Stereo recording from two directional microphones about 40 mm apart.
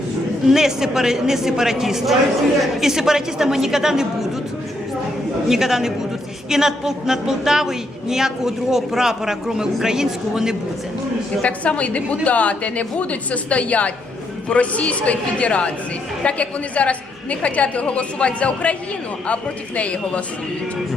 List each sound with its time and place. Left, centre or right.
0.4 s a woman's voice: centre
5.5 s a woman's voice: centre
11.4 s a woman's voice: left